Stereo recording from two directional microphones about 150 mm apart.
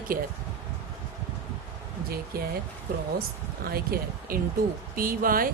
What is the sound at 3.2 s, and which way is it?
Speech, 90° right.